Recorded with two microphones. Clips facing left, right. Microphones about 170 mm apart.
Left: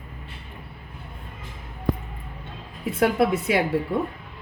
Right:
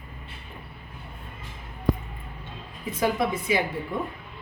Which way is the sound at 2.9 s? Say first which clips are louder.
Left 5 dB; 65° left (ahead or behind).